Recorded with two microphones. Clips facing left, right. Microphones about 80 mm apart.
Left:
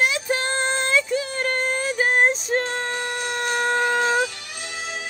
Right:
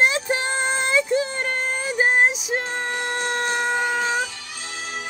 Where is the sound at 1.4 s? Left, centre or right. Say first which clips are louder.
Left 2 dB; centre.